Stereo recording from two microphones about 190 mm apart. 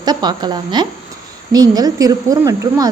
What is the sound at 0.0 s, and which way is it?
A woman's voice, 20° right (ahead or behind).